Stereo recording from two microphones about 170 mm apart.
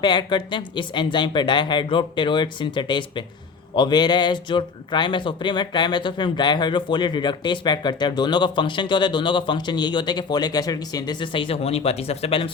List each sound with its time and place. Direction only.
0.0 s speech: 25° left (ahead or behind)